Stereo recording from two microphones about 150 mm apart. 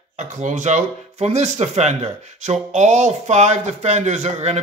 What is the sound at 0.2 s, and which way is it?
Speech, 55° right (ahead or behind).